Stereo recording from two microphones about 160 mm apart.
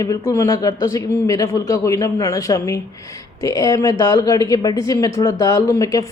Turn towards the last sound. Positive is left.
turn(degrees=20)  # may be behind; listen again after turning